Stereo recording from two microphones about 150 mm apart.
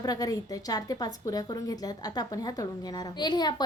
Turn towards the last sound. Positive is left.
turn(degrees=30)  # may be behind; listen again after turning